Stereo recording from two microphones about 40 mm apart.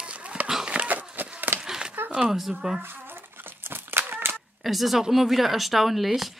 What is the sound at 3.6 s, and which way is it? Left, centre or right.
Crumpling, right.